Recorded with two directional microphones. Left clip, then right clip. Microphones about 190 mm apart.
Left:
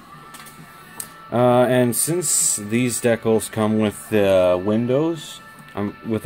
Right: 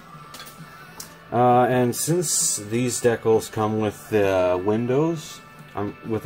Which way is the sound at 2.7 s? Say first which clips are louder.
Left 2 dB; 45° left (ahead or behind).